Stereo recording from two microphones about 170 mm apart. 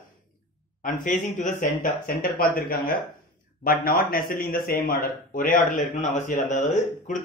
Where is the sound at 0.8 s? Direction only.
50° left (ahead or behind).